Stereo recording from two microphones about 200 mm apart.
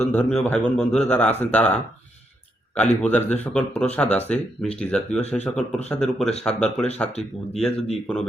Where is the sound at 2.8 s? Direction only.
5° left (ahead or behind).